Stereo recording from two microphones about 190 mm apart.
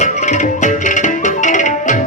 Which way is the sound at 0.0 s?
40° left (ahead or behind).